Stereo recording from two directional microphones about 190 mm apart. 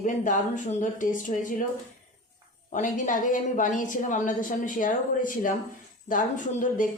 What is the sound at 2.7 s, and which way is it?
A woman's voice, 40° left (ahead or behind).